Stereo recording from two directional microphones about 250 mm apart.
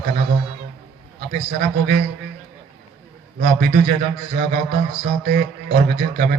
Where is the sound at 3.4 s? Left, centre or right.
Right.